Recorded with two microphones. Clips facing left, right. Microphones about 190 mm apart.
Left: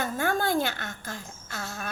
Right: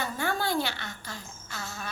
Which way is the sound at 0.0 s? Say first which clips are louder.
Left 3 dB; 50° left (ahead or behind).